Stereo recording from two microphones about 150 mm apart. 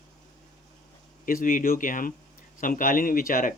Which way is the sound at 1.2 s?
70° left (ahead or behind).